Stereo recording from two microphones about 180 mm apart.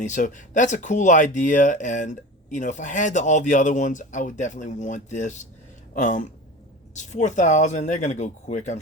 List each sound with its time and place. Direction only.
0.0 s speech: 45° left (ahead or behind)